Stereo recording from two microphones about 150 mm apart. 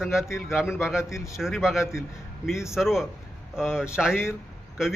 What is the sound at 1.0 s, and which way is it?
Speech, 20° left (ahead or behind).